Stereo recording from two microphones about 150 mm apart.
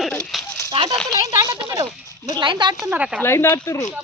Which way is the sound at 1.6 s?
30° right (ahead or behind).